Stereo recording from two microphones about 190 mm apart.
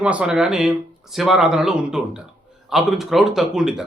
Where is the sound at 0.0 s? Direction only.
5° right (ahead or behind).